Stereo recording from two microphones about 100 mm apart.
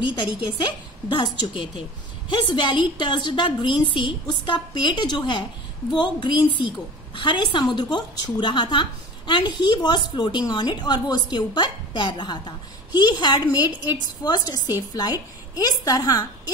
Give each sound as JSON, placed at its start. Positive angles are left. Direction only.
{"t": 0.0, "sound": "a woman's voice", "side_deg": 55}